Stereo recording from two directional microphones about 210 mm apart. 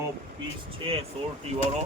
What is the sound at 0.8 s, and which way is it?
Speech, 25° right (ahead or behind).